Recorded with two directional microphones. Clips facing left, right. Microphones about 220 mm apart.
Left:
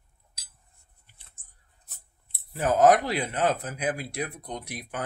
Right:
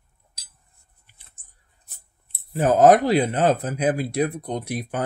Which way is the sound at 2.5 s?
30° right (ahead or behind).